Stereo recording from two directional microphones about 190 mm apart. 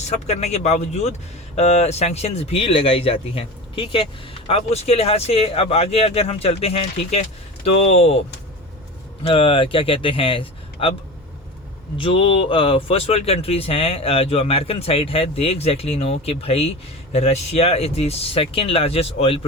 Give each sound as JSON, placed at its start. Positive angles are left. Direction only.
{"t": 0.3, "sound": "speech", "side_deg": 35}
{"t": 9.2, "sound": "speech", "side_deg": 30}
{"t": 11.9, "sound": "speech", "side_deg": 30}